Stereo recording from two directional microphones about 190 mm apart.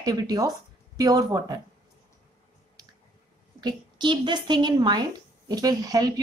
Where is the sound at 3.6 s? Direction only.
25° right (ahead or behind).